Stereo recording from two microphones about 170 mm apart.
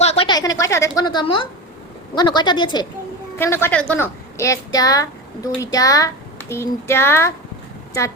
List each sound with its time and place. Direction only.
0.0 s a sound: 40° left (ahead or behind)
0.3 s a woman's voice: 20° left (ahead or behind)
3.3 s a woman's voice: 15° left (ahead or behind)